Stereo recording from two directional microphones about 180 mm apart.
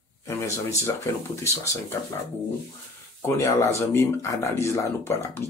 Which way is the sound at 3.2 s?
15° left (ahead or behind).